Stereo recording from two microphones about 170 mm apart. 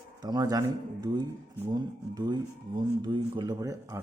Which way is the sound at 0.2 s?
25° right (ahead or behind).